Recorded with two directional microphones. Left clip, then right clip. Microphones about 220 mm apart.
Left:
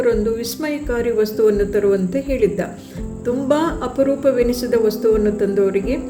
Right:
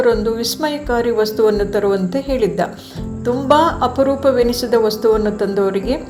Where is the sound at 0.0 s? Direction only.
15° left (ahead or behind).